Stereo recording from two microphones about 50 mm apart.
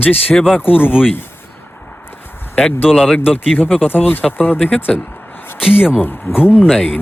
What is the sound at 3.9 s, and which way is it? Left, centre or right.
Speech, left.